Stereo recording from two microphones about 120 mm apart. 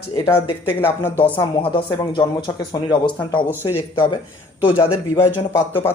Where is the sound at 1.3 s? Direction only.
45° left (ahead or behind).